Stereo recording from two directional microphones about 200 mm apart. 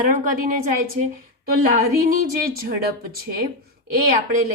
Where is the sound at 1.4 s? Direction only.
45° right (ahead or behind).